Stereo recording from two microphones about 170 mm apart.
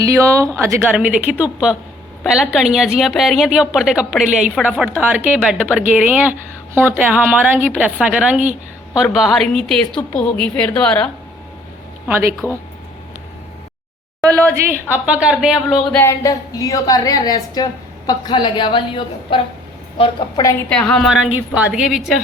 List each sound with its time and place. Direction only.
0.0 s a woman's voice: 20° right (ahead or behind); by 11.1 s 5° left (ahead or behind)
12.4 s a woman's voice: 15° right (ahead or behind)
14.5 s a woman's voice: 10° right (ahead or behind)
16.0 s a woman's voice: 15° left (ahead or behind)
20.7 s a woman's voice: 5° left (ahead or behind)